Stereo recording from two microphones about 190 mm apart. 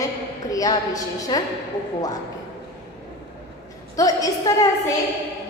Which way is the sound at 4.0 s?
20° left (ahead or behind).